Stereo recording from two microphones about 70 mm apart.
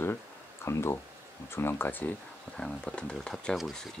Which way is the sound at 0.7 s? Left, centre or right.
Left.